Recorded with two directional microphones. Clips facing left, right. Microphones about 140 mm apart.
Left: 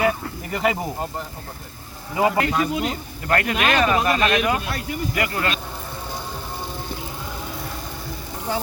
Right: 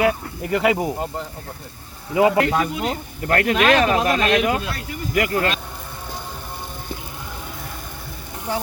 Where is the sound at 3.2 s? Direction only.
55° right (ahead or behind).